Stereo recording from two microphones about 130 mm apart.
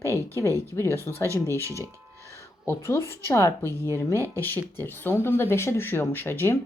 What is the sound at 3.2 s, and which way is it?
Speech, 20° left (ahead or behind).